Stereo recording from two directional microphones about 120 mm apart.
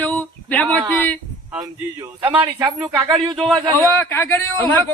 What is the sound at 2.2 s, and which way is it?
Speech, 15° right (ahead or behind).